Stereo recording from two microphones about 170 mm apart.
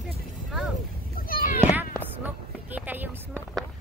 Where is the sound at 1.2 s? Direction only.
55° left (ahead or behind).